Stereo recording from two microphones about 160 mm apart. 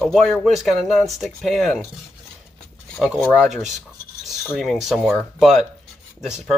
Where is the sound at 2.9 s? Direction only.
Centre (ahead or behind).